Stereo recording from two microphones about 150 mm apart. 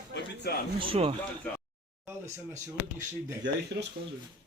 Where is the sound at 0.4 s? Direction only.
90° left.